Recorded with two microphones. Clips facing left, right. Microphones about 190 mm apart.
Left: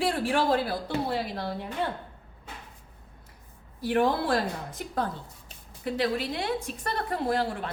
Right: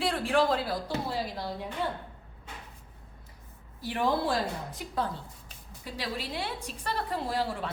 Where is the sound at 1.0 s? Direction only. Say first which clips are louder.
Left 3 dB; 60° left (ahead or behind).